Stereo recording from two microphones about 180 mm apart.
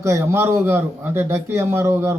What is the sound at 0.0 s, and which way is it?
A man's voice, 15° right (ahead or behind).